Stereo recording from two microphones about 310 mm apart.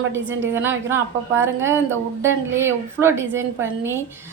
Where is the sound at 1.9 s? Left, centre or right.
Centre.